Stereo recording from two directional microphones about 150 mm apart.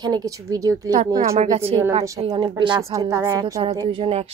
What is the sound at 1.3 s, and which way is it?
A woman's voice, 45° right (ahead or behind).